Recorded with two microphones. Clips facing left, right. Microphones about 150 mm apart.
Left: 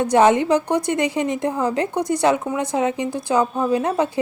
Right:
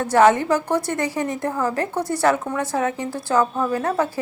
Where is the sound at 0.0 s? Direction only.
20° left (ahead or behind).